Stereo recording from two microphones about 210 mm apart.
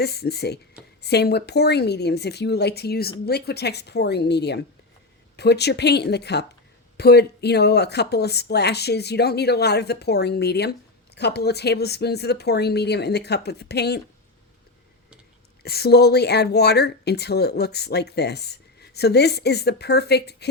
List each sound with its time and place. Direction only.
0.0 s a woman's voice: 50° left (ahead or behind)
15.6 s a woman's voice: 50° left (ahead or behind)